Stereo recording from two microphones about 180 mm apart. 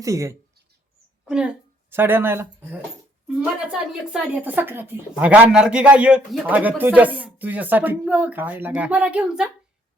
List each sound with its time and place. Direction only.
0.0 s speech: 15° right (ahead or behind)
1.2 s a woman's voice: 5° right (ahead or behind)